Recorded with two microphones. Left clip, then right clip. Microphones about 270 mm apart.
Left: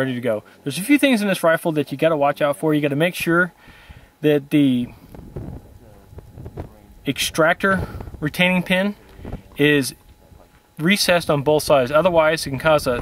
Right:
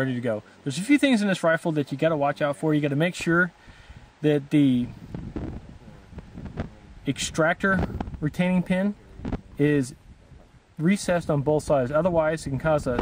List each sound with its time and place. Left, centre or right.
0.0 s speech: centre
7.1 s speech: centre
10.8 s speech: centre